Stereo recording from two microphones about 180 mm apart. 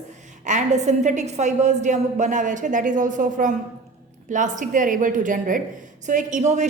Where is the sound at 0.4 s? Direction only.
40° right (ahead or behind).